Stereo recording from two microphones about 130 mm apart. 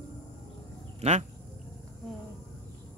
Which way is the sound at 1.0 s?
60° right (ahead or behind).